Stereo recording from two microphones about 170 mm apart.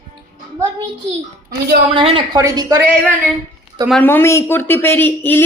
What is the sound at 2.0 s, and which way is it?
Speech, 30° right (ahead or behind).